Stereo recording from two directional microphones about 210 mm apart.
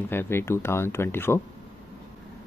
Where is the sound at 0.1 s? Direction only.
10° left (ahead or behind).